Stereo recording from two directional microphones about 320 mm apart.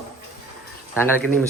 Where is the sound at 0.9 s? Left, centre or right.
Centre.